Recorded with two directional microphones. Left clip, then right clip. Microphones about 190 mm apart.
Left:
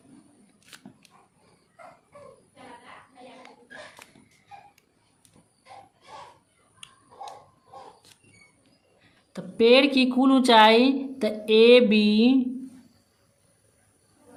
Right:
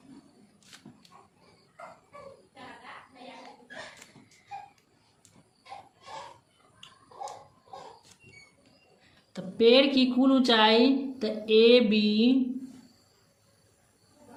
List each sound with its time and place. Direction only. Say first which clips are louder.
9.3 s a woman's voice: left 3 dB; 40° left (ahead or behind)